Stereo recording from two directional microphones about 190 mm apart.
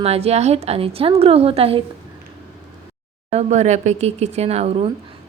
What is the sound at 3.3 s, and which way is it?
A woman's voice, 35° right (ahead or behind).